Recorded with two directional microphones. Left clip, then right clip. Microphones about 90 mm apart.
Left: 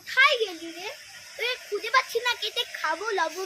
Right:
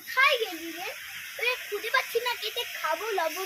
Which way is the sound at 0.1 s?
30° left (ahead or behind).